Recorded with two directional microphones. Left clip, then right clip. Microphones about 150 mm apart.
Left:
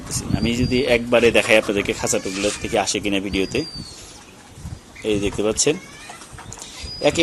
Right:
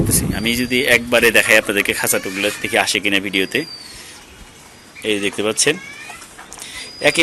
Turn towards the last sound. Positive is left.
turn(degrees=10)  # may be behind; listen again after turning